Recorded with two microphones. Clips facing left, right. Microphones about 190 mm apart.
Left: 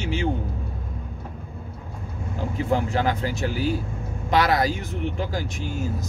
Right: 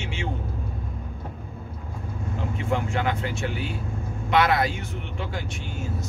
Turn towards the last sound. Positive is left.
turn(degrees=35)  # may be behind; listen again after turning